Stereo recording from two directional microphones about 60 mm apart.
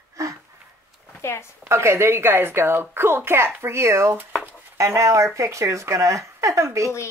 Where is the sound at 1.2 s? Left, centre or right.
Left.